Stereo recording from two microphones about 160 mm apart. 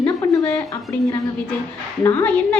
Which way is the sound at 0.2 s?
15° left (ahead or behind).